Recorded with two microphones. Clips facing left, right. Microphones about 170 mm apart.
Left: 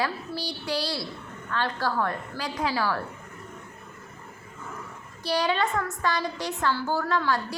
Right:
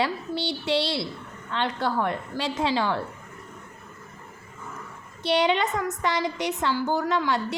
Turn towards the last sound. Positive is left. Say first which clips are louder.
# right 1 dB
turn(degrees=-20)  # may be behind; listen again after turning